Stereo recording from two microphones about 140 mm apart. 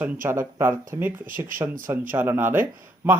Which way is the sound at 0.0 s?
15° right (ahead or behind).